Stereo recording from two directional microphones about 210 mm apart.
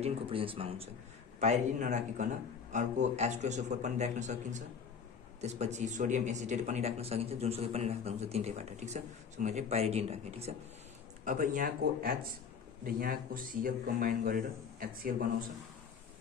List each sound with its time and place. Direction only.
0.0 s speech: 25° right (ahead or behind); by 15.2 s 45° right (ahead or behind)